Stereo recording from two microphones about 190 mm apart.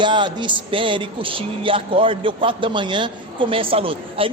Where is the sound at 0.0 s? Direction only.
25° right (ahead or behind).